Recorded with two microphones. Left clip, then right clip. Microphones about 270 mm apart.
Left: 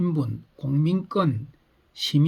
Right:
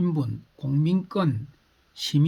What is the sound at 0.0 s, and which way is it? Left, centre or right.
Speech, centre.